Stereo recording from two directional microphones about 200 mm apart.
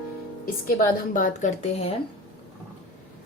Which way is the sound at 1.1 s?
40° left (ahead or behind).